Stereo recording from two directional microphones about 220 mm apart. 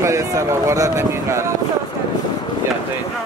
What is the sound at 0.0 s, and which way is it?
Speech, 15° right (ahead or behind).